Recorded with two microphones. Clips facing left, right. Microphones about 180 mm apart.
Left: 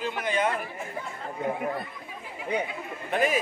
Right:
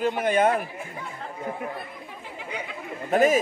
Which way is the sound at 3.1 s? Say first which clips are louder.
Right 6 dB; 45° right (ahead or behind).